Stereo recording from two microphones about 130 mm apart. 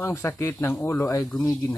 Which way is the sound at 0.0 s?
20° left (ahead or behind).